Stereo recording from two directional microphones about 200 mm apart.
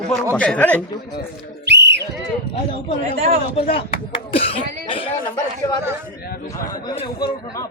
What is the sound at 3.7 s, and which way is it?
Speech, 25° left (ahead or behind).